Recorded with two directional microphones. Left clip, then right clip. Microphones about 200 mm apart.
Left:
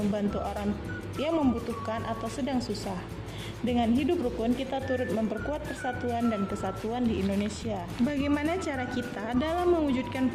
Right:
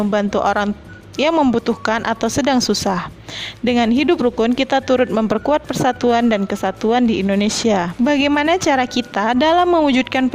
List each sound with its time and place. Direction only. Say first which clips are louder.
0.1 s speech: right 15 dB; 45° right (ahead or behind)